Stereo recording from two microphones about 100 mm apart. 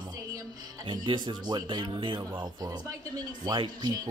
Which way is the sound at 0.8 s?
55° right (ahead or behind).